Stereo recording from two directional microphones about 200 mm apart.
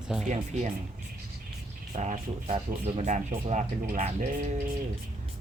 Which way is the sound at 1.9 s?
35° right (ahead or behind).